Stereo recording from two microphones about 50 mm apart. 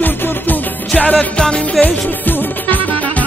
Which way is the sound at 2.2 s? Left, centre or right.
Left.